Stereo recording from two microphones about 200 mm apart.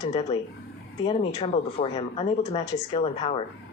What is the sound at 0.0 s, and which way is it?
A woman's voice, 35° left (ahead or behind).